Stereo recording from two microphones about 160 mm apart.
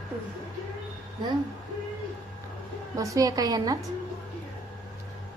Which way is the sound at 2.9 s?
20° right (ahead or behind).